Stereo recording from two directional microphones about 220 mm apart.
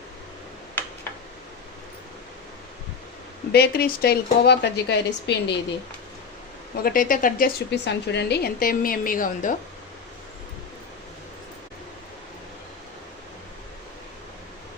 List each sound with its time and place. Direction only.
3.5 s speech: 45° left (ahead or behind)
6.8 s a woman's voice: 40° left (ahead or behind)